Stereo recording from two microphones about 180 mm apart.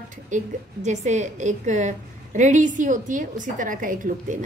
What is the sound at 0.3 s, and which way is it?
A woman's voice, 45° right (ahead or behind).